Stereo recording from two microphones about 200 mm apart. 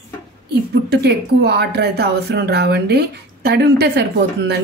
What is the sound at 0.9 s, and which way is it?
Speech, 55° right (ahead or behind).